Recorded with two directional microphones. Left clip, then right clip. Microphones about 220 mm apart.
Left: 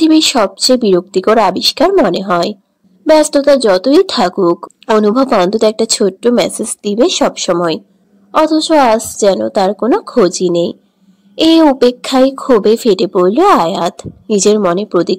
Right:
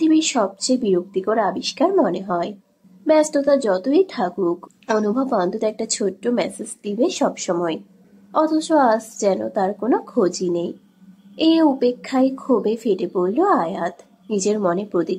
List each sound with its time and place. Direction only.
0.0 s speech: 40° left (ahead or behind)